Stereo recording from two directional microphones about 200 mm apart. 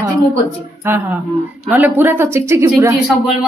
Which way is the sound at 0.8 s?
10° right (ahead or behind).